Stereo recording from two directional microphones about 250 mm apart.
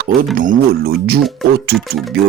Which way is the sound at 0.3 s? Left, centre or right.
Right.